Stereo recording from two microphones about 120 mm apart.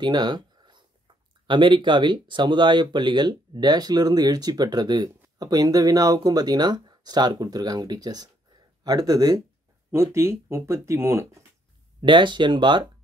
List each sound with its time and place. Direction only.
0.0 s speech: 40° right (ahead or behind)
9.8 s speech: 20° right (ahead or behind)
12.0 s speech: 40° right (ahead or behind)